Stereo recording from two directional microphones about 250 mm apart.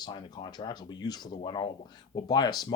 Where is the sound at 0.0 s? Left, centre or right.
Centre.